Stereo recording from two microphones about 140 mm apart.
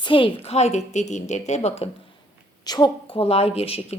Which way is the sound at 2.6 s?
30° left (ahead or behind).